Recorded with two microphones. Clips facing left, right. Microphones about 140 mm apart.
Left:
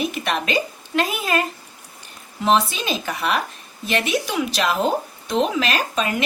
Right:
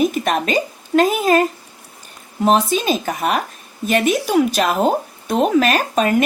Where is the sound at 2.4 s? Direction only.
45° right (ahead or behind).